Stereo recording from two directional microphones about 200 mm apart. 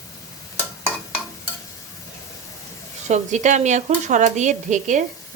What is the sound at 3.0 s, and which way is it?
Speech, 35° right (ahead or behind).